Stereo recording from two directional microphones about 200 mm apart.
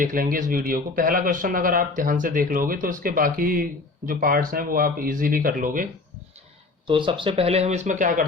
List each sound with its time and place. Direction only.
0.0 s speech: 45° right (ahead or behind)
6.8 s speech: 25° right (ahead or behind); by 8.2 s 40° right (ahead or behind)